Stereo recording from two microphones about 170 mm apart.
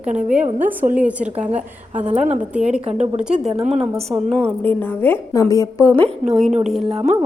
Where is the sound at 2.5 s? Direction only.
5° right (ahead or behind); by 6.0 s 15° left (ahead or behind).